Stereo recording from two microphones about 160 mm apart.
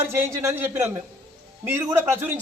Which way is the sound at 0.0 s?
15° right (ahead or behind).